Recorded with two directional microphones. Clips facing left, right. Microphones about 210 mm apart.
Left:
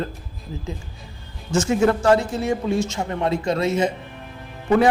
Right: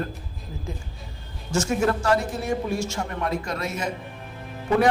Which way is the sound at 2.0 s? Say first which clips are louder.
Left 5 dB; 25° left (ahead or behind).